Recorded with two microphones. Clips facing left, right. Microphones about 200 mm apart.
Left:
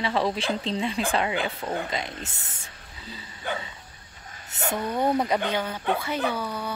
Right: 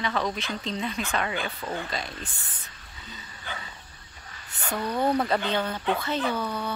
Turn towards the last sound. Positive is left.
turn(degrees=10)  # may be behind; listen again after turning